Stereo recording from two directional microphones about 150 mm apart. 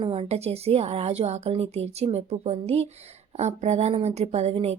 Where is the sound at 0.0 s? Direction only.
40° right (ahead or behind).